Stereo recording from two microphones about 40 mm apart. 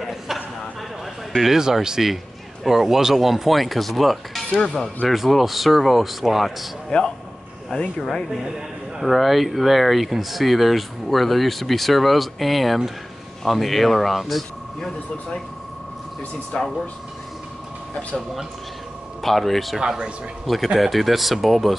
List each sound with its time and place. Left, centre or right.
0.0 s a sound: centre
1.4 s speech: centre
6.9 s speech: left
8.0 s speech: centre
8.3 s speech: centre
14.8 s speech: centre
16.5 s speech: left
19.2 s speech: centre